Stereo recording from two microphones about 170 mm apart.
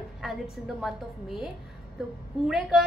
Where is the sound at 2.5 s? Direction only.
5° right (ahead or behind).